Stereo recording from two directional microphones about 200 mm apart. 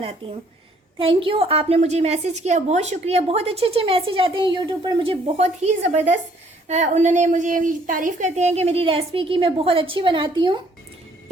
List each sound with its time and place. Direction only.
0.2 s a woman's voice: 25° right (ahead or behind)